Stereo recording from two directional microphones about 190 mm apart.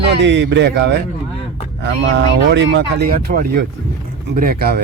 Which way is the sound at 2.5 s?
70° right (ahead or behind).